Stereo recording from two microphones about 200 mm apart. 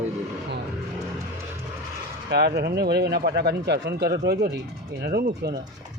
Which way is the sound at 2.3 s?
55° right (ahead or behind).